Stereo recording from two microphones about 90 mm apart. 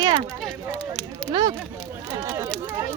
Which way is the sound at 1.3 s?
50° right (ahead or behind).